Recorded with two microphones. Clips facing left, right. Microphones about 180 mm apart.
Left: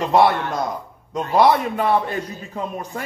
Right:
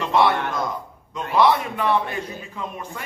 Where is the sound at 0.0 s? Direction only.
40° left (ahead or behind).